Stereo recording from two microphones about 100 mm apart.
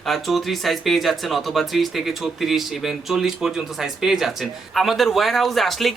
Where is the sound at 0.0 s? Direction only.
Centre (ahead or behind).